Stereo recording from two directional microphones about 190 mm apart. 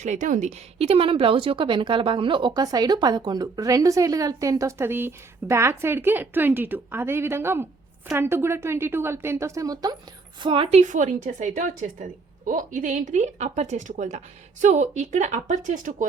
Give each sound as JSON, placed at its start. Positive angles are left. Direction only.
{"t": 0.0, "sound": "a woman's voice", "side_deg": -40}